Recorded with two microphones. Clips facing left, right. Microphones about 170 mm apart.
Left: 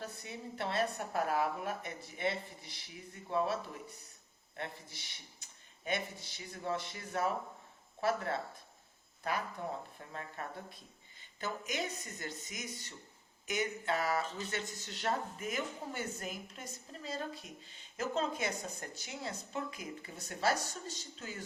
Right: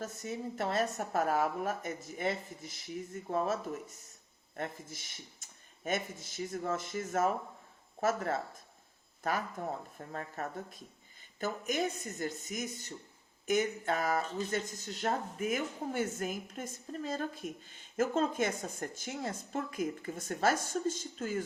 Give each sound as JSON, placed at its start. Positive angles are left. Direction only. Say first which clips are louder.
{"t": 0.0, "sound": "a woman's voice", "louder": "right 6 dB", "side_deg": -45}
{"t": 10.1, "sound": "a woman's voice", "louder": "right 5 dB", "side_deg": -45}